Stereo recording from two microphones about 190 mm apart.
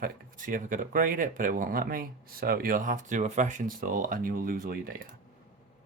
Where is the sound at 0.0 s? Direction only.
45° right (ahead or behind).